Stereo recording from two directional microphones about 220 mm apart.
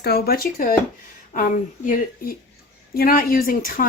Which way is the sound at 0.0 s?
45° left (ahead or behind).